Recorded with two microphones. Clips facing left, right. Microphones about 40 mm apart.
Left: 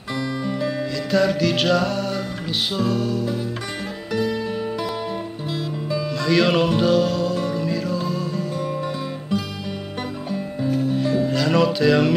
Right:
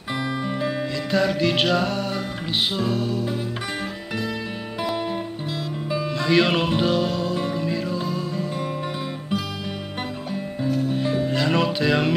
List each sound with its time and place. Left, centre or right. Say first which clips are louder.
0.2 s music: left 2 dB; right
1.1 s music: left 2 dB; centre
5.9 s music: even; right
11.0 s music: left 2 dB; centre